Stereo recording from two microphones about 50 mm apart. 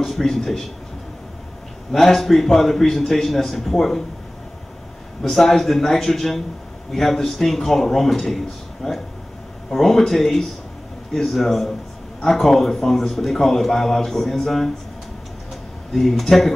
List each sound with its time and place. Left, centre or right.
0.0 s a man's voice: centre
1.9 s a man's voice: centre
5.2 s a man's voice: centre
15.9 s a man's voice: centre